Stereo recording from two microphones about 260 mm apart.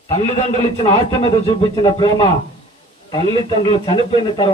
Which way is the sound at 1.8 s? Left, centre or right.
Centre.